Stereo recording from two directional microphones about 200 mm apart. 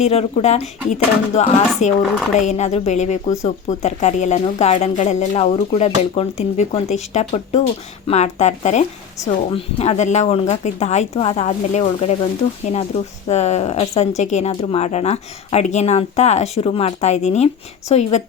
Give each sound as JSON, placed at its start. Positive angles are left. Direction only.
{"t": 0.0, "sound": "speech", "side_deg": 30}
{"t": 13.2, "sound": "speech", "side_deg": 35}